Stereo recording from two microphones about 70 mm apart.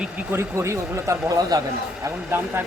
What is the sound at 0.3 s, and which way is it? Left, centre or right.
Speech, right.